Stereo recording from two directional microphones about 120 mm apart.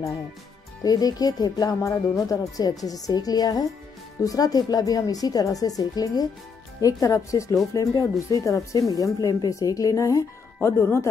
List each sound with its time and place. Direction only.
0.8 s speech: 30° left (ahead or behind)